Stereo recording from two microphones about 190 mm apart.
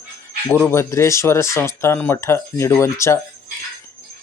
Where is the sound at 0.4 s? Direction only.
15° left (ahead or behind).